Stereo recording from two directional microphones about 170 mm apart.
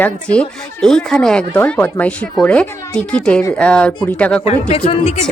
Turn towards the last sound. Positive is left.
turn(degrees=35)  # may be behind; listen again after turning